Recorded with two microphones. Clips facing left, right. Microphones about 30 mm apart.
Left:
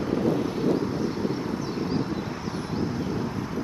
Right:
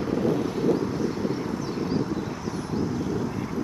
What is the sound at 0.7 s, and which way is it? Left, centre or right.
Vehicle, left.